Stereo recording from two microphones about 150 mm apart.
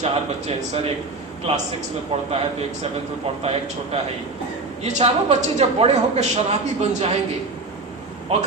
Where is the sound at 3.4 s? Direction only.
45° right (ahead or behind).